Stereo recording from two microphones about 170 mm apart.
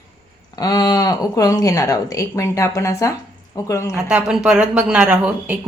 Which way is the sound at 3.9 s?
5° right (ahead or behind).